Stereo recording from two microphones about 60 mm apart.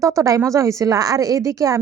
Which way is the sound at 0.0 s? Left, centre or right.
Right.